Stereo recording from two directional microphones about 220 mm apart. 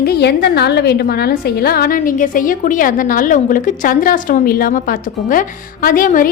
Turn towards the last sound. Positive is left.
turn(degrees=40)  # may be behind; listen again after turning